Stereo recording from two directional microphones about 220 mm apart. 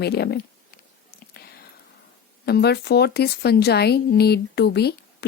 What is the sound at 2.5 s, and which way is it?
Speech, 45° left (ahead or behind).